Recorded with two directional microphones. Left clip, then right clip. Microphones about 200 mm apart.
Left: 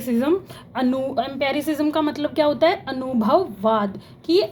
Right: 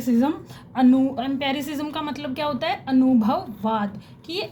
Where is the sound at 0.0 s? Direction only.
25° left (ahead or behind).